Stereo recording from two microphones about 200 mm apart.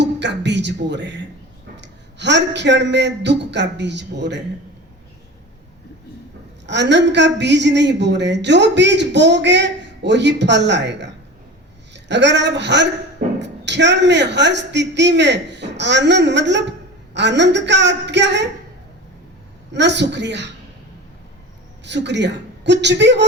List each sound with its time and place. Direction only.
0.0 s a man's voice: 60° right (ahead or behind)
6.7 s a man's voice: 60° right (ahead or behind)
19.7 s a man's voice: 60° right (ahead or behind)
21.8 s a man's voice: 60° right (ahead or behind)